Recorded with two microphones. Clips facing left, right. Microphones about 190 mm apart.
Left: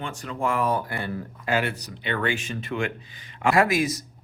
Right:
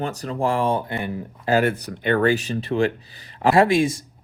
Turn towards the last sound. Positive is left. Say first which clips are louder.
# right 5 dB
turn(degrees=-30)  # may be behind; listen again after turning